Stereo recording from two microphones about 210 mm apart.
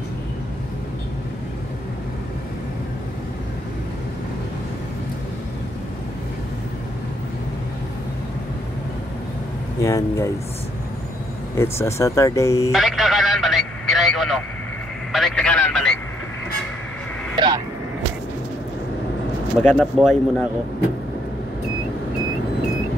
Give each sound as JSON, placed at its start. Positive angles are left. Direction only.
{"t": 9.8, "sound": "speech", "side_deg": 15}
{"t": 11.5, "sound": "speech", "side_deg": 15}
{"t": 12.7, "sound": "a sound", "side_deg": 0}
{"t": 15.1, "sound": "speech", "side_deg": 0}
{"t": 19.6, "sound": "speech", "side_deg": 5}